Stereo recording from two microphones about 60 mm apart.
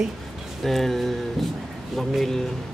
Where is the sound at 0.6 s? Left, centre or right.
Centre.